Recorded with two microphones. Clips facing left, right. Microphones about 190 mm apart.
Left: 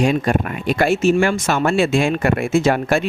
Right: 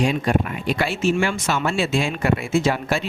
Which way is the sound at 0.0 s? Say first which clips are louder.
Left 3 dB; 50° left (ahead or behind).